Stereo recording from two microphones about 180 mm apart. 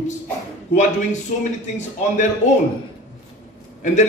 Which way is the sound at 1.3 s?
50° left (ahead or behind).